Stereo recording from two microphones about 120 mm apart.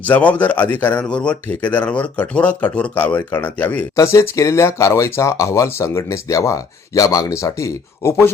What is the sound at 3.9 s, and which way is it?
Speech, 25° left (ahead or behind).